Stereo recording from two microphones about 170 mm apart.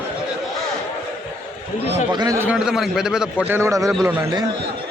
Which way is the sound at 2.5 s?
5° right (ahead or behind).